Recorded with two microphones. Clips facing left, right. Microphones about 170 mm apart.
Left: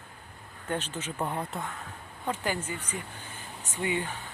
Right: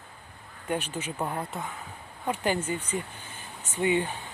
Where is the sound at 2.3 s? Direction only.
20° right (ahead or behind).